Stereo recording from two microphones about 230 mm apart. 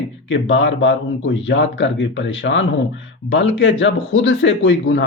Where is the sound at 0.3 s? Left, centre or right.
Left.